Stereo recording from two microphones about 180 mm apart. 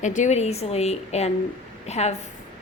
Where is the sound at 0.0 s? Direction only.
45° left (ahead or behind).